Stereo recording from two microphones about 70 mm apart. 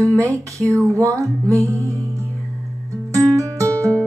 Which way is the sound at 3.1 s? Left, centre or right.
Right.